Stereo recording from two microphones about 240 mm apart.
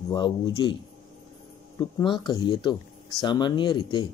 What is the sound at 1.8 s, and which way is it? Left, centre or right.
Speech, centre.